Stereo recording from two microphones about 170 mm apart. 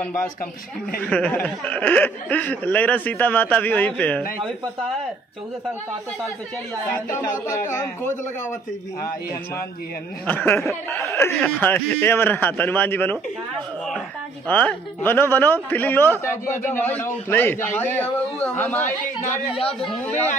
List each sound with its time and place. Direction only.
1.0 s speech: 10° left (ahead or behind)
7.7 s speech: 15° left (ahead or behind)
10.2 s speech: 10° left (ahead or behind)
14.5 s speech: 10° left (ahead or behind)